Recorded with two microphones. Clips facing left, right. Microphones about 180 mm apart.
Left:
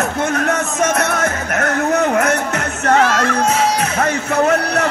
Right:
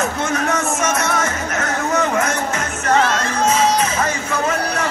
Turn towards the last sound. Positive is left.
turn(degrees=65)  # may be behind; listen again after turning